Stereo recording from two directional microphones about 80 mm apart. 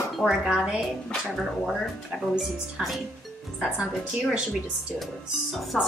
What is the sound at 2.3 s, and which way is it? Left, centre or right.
Speech, centre.